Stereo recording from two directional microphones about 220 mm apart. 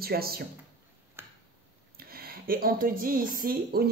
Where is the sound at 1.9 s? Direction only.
45° right (ahead or behind).